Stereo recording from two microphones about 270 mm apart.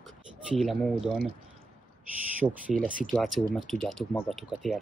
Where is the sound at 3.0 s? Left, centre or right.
Centre.